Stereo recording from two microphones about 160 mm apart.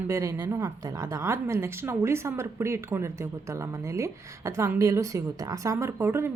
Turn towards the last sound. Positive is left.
turn(degrees=-15)  # may be behind; listen again after turning